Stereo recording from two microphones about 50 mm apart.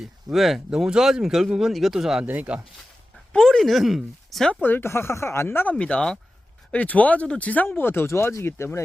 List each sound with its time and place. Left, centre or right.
0.0 s speech: centre
0.7 s speech: centre
2.2 s speech: right
3.3 s speech: centre
4.6 s speech: left
4.9 s speech: left
5.7 s speech: left
7.8 s speech: left